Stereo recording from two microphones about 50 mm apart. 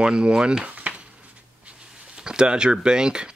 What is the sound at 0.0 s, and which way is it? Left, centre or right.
Speech, centre.